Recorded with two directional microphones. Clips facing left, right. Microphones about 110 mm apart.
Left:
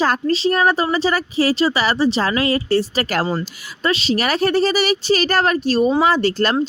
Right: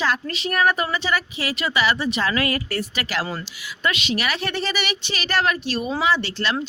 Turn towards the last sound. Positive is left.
turn(degrees=45)  # may be behind; listen again after turning